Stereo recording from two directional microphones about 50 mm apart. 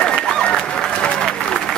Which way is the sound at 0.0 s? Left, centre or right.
Centre.